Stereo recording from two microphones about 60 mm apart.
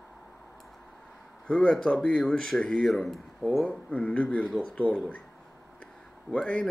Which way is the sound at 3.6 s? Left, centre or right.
Left.